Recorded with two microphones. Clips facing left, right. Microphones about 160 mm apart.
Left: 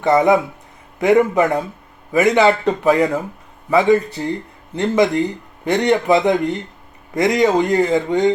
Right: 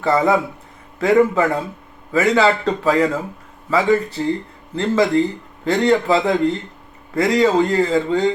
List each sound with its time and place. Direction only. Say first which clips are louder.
0.0 s a man's voice: left 3 dB; 20° left (ahead or behind)